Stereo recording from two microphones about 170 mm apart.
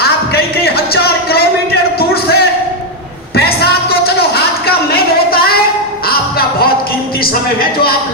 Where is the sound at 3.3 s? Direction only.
70° left (ahead or behind).